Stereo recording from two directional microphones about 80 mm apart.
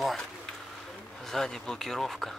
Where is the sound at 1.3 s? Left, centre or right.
Centre.